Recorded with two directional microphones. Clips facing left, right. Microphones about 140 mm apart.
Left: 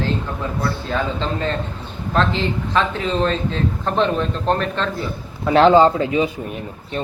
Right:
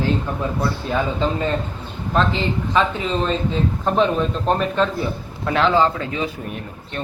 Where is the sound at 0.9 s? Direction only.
10° right (ahead or behind).